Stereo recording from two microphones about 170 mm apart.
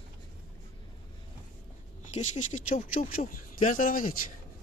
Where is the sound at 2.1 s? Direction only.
45° left (ahead or behind).